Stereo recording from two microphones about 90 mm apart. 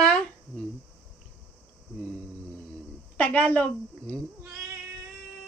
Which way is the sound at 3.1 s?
15° left (ahead or behind).